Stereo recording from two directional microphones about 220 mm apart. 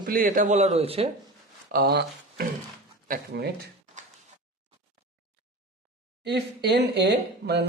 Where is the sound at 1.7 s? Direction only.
45° right (ahead or behind).